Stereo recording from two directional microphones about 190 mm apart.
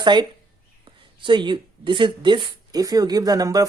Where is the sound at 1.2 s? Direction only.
25° right (ahead or behind).